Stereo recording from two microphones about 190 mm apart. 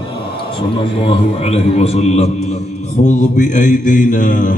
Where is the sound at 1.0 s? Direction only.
35° left (ahead or behind).